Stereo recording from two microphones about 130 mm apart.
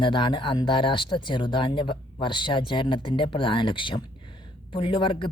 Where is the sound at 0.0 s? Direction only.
40° left (ahead or behind).